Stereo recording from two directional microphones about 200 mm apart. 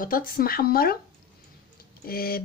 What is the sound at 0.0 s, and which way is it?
Speech, 45° left (ahead or behind).